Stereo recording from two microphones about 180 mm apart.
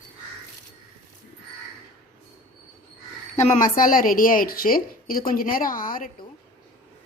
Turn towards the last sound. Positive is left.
turn(degrees=50)  # may be behind; listen again after turning